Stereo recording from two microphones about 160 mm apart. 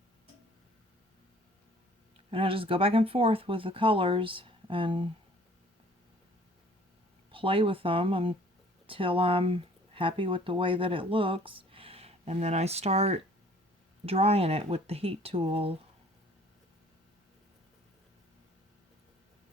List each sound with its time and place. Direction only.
2.3 s speech: 35° right (ahead or behind)
7.3 s speech: 35° right (ahead or behind)